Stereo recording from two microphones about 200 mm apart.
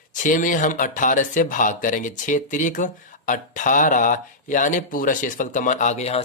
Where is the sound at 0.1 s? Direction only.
40° left (ahead or behind).